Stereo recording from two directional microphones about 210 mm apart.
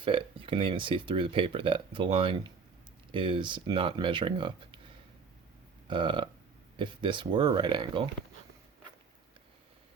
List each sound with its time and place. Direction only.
0.0 s speech: 25° right (ahead or behind)
5.9 s speech: 20° right (ahead or behind)